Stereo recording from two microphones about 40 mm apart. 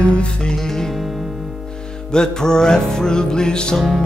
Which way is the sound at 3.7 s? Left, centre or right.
Centre.